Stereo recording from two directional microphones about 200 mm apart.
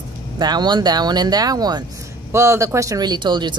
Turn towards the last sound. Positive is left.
turn(degrees=-20)  # may be behind; listen again after turning